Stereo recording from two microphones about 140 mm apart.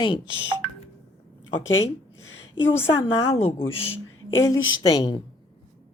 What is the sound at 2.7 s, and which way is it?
Speech, 15° left (ahead or behind).